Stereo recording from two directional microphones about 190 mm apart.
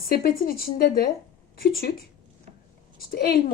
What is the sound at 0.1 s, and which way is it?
Speech, 50° left (ahead or behind).